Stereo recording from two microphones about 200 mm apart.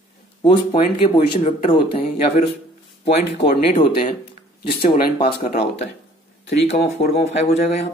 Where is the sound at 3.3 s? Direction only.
40° left (ahead or behind).